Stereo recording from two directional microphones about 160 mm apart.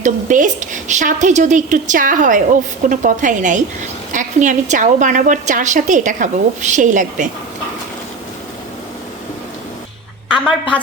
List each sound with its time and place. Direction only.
0.0 s a woman's voice: 50° right (ahead or behind)